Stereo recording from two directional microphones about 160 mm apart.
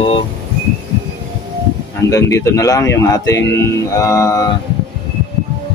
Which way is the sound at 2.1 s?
20° left (ahead or behind).